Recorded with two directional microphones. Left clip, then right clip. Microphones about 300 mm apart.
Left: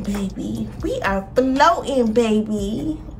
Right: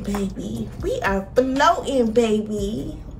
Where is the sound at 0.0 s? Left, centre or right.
Centre.